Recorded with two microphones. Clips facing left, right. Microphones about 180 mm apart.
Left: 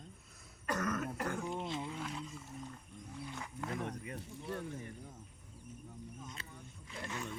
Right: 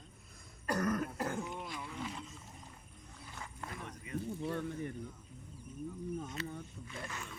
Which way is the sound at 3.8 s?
55° left (ahead or behind).